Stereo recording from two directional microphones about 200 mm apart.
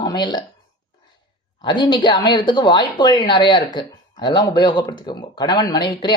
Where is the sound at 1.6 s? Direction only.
25° left (ahead or behind).